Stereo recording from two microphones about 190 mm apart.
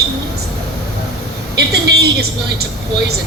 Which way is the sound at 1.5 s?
60° right (ahead or behind).